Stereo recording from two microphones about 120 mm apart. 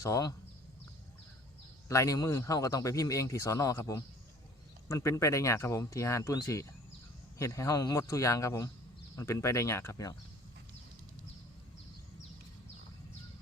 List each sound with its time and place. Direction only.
0.0 s speech: 30° left (ahead or behind)
1.9 s speech: 25° left (ahead or behind)